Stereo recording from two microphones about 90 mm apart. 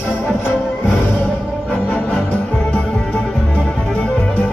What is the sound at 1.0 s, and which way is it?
Music, 20° left (ahead or behind).